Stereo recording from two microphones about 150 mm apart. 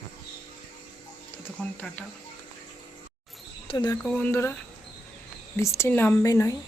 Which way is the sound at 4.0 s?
10° left (ahead or behind).